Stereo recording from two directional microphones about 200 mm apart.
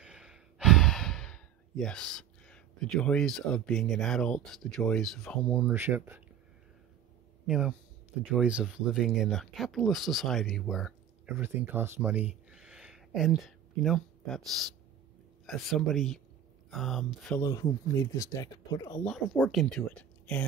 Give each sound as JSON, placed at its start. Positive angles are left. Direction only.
{"t": 0.0, "sound": "speech", "side_deg": -5}
{"t": 7.4, "sound": "speech", "side_deg": -5}
{"t": 11.2, "sound": "speech", "side_deg": -10}
{"t": 12.4, "sound": "a sound", "side_deg": -5}
{"t": 13.8, "sound": "speech", "side_deg": 5}
{"t": 17.4, "sound": "speech", "side_deg": 15}
{"t": 19.0, "sound": "speech", "side_deg": 0}